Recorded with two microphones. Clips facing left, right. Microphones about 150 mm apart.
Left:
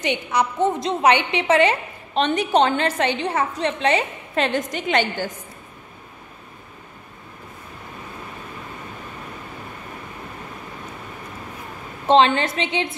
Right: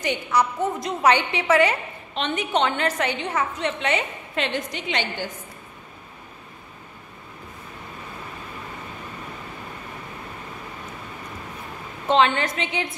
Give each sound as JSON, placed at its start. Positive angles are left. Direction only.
{"t": 0.0, "sound": "a woman's voice", "side_deg": 20}
{"t": 2.1, "sound": "a woman's voice", "side_deg": 35}
{"t": 4.5, "sound": "a woman's voice", "side_deg": 45}
{"t": 12.1, "sound": "a woman's voice", "side_deg": 30}